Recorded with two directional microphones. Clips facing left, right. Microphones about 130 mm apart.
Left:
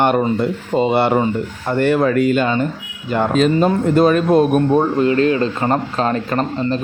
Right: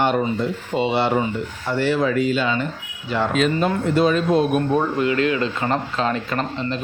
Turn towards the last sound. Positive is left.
turn(degrees=40)  # may be behind; listen again after turning